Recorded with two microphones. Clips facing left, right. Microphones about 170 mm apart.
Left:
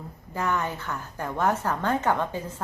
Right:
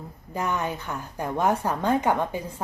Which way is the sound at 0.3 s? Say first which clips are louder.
Even; 15° right (ahead or behind).